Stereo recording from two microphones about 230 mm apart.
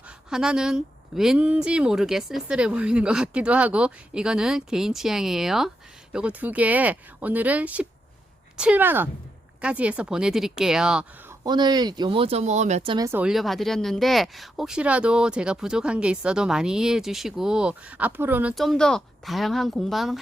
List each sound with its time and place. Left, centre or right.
0.3 s speech: centre
11.4 s speech: centre
13.1 s speech: centre